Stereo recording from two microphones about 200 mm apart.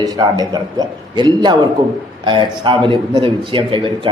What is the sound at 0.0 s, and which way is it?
A man's voice, 20° right (ahead or behind).